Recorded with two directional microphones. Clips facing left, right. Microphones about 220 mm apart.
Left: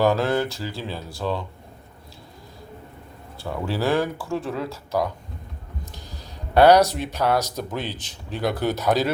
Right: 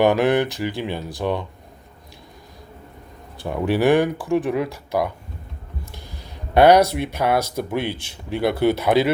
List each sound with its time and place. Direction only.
0.0 s speech: 15° right (ahead or behind)
3.4 s speech: 20° right (ahead or behind)
6.5 s speech: 10° right (ahead or behind)
6.8 s speech: 60° right (ahead or behind)
7.2 s speech: 10° right (ahead or behind)
7.8 s speech: 60° right (ahead or behind)
8.4 s speech: 10° right (ahead or behind)